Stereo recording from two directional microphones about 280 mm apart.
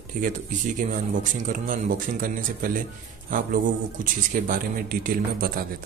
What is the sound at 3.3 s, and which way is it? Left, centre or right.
Speech, right.